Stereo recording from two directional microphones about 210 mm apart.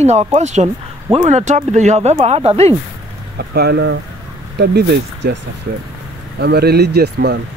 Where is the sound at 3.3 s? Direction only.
50° right (ahead or behind).